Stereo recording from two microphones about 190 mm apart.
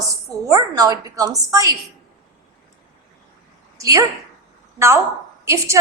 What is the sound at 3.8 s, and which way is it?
Speech, 15° right (ahead or behind).